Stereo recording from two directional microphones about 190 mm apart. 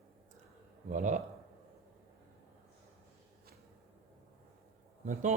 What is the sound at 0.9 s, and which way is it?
Speech, 40° right (ahead or behind).